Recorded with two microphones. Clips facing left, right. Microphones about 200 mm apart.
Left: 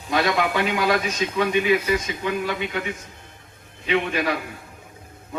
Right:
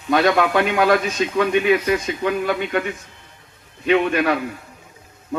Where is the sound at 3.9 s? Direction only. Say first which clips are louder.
Right 5 dB; 60° right (ahead or behind).